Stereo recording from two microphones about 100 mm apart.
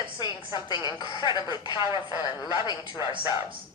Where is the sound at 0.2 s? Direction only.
50° left (ahead or behind).